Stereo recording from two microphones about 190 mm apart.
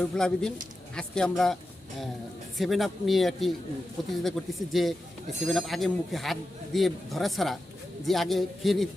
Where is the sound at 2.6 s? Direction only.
Centre (ahead or behind).